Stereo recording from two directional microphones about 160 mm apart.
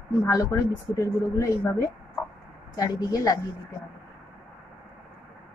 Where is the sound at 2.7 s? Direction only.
20° left (ahead or behind).